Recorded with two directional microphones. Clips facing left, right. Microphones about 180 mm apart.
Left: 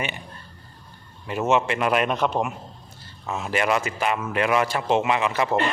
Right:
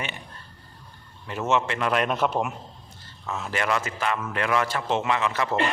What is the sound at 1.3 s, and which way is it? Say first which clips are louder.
Speech: left 3 dB; 10° left (ahead or behind).